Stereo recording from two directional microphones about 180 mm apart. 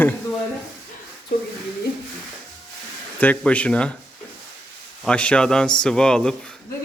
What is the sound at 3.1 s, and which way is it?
Speech, 10° left (ahead or behind).